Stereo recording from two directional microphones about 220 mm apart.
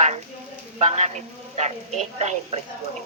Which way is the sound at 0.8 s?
30° right (ahead or behind).